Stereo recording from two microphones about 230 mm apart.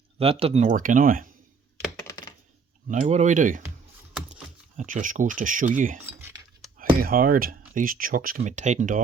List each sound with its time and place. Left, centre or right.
0.2 s speech: right
2.8 s speech: right
4.8 s speech: right
6.1 s chink: centre
7.0 s speech: right